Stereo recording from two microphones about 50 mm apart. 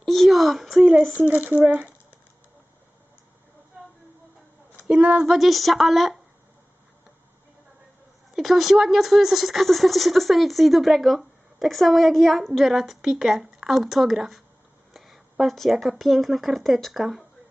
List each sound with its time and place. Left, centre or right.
0.0 s a sound: centre
1.1 s speech: right
1.6 s a sound: right
4.8 s speech: right
5.1 s speech: centre
8.4 s speech: centre